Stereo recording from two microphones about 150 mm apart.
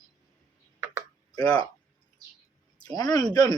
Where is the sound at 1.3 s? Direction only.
25° left (ahead or behind).